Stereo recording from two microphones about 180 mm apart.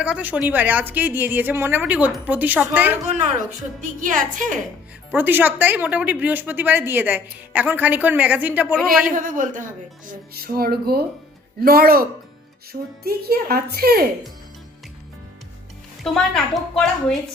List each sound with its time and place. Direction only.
0.0 s a woman's voice: 10° right (ahead or behind)
3.8 s a woman's voice: 45° right (ahead or behind)
5.1 s a woman's voice: 10° right (ahead or behind)
9.0 s a woman's voice: 45° right (ahead or behind)
10.1 s a woman's voice: 55° right (ahead or behind)
16.0 s a woman's voice: centre (ahead or behind)